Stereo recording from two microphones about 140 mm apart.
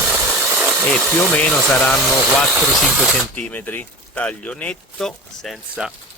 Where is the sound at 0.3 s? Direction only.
10° left (ahead or behind).